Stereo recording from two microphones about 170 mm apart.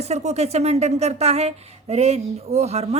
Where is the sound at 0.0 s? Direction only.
40° right (ahead or behind).